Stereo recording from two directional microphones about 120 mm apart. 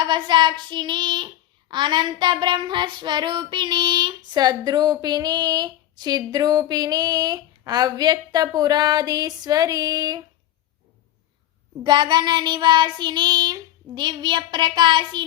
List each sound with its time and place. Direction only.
0.0 s child singing: 40° right (ahead or behind)
11.8 s child singing: 40° right (ahead or behind)